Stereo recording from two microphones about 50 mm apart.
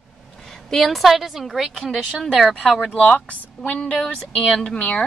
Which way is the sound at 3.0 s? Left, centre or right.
Left.